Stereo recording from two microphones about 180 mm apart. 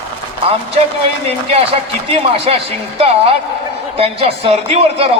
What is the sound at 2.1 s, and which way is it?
A man's voice, 35° right (ahead or behind).